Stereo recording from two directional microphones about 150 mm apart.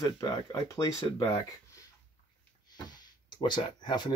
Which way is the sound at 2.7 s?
30° left (ahead or behind).